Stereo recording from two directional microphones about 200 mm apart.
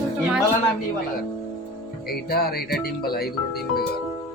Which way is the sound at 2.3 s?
50° left (ahead or behind).